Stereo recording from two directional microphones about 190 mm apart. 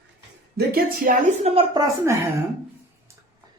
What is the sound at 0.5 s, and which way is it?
Speech, 50° right (ahead or behind).